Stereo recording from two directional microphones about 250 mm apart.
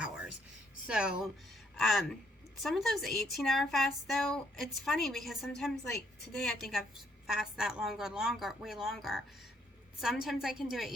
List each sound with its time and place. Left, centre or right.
0.9 s speech: centre